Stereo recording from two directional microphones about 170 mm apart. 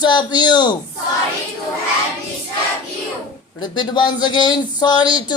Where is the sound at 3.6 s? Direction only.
25° left (ahead or behind).